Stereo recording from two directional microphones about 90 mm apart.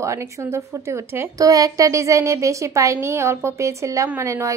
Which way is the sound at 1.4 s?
40° right (ahead or behind).